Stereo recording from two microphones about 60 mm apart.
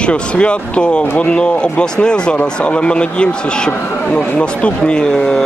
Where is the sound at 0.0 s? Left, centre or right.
Centre.